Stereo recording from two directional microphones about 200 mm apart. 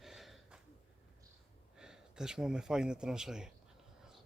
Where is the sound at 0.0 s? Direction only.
Centre (ahead or behind).